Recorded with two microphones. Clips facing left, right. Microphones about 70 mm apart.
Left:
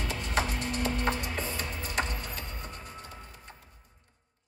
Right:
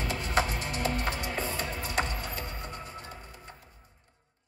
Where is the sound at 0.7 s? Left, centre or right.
Right.